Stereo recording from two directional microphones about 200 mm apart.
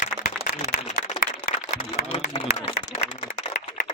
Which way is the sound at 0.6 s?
35° left (ahead or behind).